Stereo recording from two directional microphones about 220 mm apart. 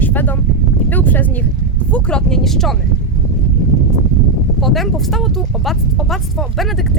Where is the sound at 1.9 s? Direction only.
5° left (ahead or behind).